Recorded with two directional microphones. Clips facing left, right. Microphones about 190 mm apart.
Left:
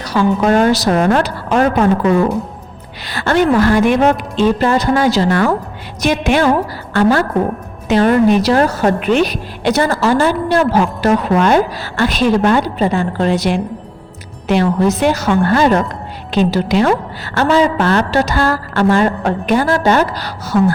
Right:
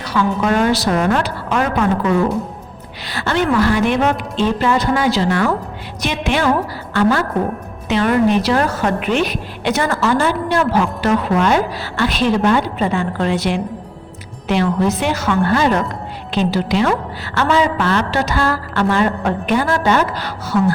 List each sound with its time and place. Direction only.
0.0 s a woman's voice: 40° left (ahead or behind)
3.1 s a woman's voice: 50° left (ahead or behind)
7.9 s a woman's voice: 40° left (ahead or behind)